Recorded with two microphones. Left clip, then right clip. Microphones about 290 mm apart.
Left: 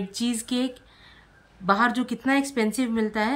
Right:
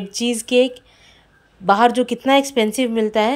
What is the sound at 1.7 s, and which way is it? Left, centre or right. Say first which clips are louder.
A woman's voice: right 8 dB; centre.